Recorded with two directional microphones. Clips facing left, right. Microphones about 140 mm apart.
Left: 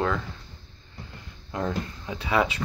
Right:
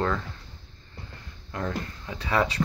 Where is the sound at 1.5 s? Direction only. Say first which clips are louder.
Left 2 dB; 20° left (ahead or behind).